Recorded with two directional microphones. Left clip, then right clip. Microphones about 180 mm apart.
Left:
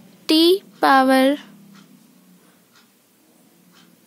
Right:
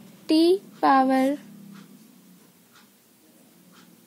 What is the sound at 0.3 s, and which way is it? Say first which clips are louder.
Speech: left 4 dB; 40° left (ahead or behind).